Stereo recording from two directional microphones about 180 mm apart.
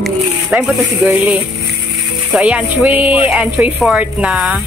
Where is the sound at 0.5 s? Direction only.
5° right (ahead or behind).